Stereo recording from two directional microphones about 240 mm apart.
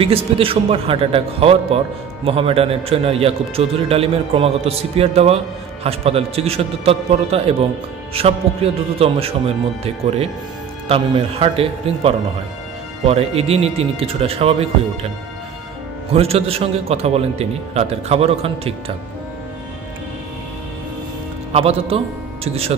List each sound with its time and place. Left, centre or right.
0.0 s a man's voice: right
10.9 s a man's voice: right
16.1 s a man's voice: right
21.5 s a man's voice: right